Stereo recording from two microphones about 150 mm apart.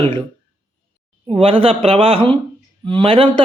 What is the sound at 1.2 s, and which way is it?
A man's voice, 35° right (ahead or behind).